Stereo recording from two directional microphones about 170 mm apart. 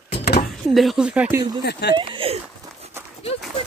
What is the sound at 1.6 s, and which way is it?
Speech, 75° left (ahead or behind).